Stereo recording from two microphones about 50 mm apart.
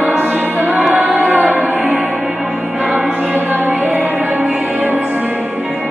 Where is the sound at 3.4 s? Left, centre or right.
Right.